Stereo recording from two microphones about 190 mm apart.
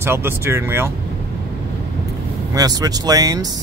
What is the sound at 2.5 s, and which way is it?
Speech, 20° right (ahead or behind).